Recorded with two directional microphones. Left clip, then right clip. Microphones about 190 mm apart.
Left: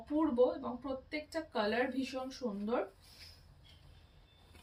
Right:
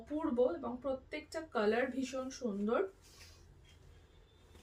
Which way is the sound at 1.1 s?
20° right (ahead or behind).